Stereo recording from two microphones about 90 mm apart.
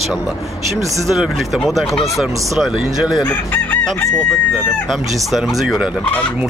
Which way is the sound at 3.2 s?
15° left (ahead or behind).